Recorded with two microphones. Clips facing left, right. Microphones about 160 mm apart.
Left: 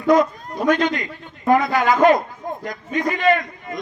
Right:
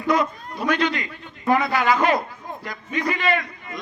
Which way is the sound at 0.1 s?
45° left (ahead or behind).